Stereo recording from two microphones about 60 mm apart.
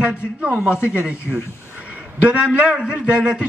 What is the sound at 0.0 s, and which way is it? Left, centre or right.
Speech, centre.